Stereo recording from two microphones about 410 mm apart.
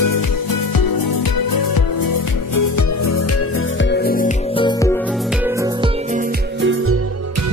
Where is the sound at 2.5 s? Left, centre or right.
Left.